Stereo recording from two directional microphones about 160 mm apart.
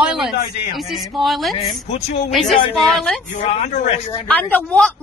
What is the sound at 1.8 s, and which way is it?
Speech, 40° left (ahead or behind).